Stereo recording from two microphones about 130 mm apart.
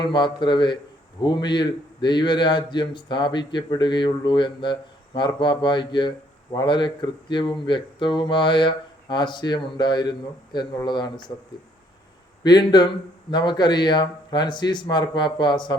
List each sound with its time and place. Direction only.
0.0 s a man's voice: 35° left (ahead or behind)
12.4 s a man's voice: 35° left (ahead or behind)